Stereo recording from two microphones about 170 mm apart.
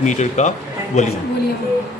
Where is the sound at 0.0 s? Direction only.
45° left (ahead or behind).